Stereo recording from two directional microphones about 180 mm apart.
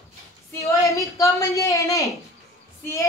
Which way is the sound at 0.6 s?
15° left (ahead or behind).